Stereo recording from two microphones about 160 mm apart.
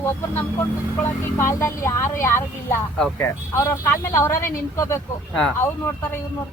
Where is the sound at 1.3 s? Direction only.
20° left (ahead or behind).